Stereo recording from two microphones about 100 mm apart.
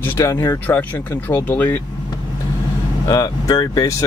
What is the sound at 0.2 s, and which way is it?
Speech, 30° left (ahead or behind).